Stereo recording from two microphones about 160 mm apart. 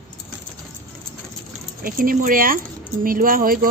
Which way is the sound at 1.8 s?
65° right (ahead or behind).